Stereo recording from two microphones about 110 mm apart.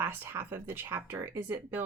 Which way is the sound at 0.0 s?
20° right (ahead or behind).